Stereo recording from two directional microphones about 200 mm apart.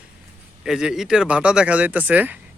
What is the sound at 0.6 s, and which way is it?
Speech, 5° right (ahead or behind).